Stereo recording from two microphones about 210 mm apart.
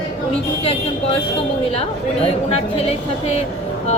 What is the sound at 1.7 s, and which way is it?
A woman's voice, 30° left (ahead or behind).